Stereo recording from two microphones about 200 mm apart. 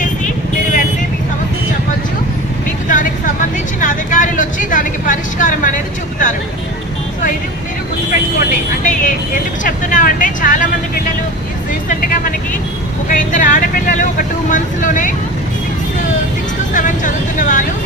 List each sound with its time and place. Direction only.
2.9 s vehicle: 40° left (ahead or behind)
8.4 s vehicle: 40° left (ahead or behind)
11.9 s vehicle: 40° left (ahead or behind)
16.7 s a sound: 40° left (ahead or behind)